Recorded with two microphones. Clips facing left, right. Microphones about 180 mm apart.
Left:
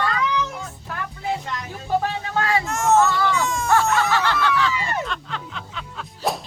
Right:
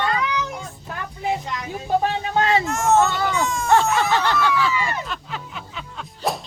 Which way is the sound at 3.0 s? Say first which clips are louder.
Left 1 dB; 20° right (ahead or behind).